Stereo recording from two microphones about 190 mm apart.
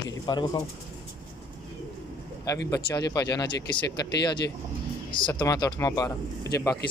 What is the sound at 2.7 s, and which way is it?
Speech, 20° left (ahead or behind).